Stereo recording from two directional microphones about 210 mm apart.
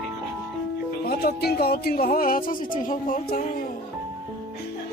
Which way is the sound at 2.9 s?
40° left (ahead or behind).